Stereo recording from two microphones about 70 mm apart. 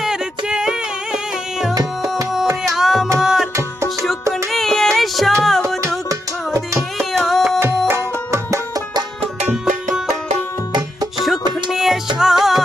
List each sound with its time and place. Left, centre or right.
0.0 s music: centre
1.7 s music: right
2.6 s music: centre
6.7 s music: centre
7.9 s music: right
11.7 s music: centre